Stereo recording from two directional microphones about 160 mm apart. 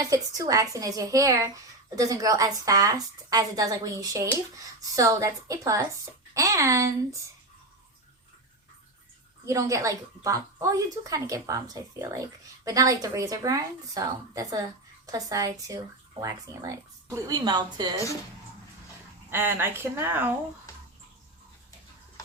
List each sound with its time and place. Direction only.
0.0 s a woman's voice: 20° right (ahead or behind)
9.5 s a woman's voice: 20° right (ahead or behind)
19.3 s speech: 15° right (ahead or behind)